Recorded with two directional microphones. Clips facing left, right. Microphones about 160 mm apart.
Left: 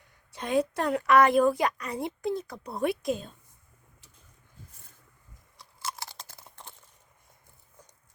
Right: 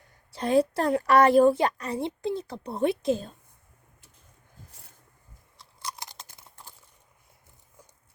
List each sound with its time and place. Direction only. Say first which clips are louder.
0.3 s a woman's voice: right 4 dB; 35° right (ahead or behind)
5.5 s chewing: left 1 dB; 15° right (ahead or behind)